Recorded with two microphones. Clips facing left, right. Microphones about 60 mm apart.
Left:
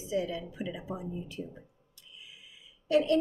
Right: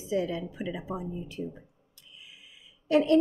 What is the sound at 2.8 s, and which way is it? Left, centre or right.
Speech, right.